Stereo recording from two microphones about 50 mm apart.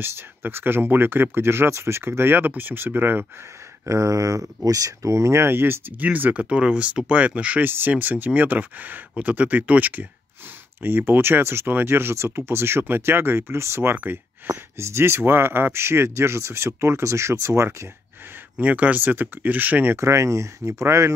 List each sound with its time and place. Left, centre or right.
0.0 s speech: right
3.8 s speech: right
5.9 s speech: right
6.5 s speech: right
7.6 s speech: right
10.8 s speech: right
18.6 s speech: right
20.0 s speech: right